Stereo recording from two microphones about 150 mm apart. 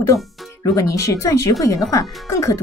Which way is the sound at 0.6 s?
20° left (ahead or behind).